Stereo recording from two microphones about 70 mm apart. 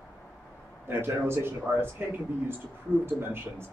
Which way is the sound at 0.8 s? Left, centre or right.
Right.